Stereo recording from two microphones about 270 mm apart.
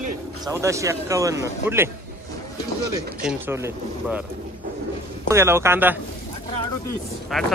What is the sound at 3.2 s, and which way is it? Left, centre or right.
Speech, centre.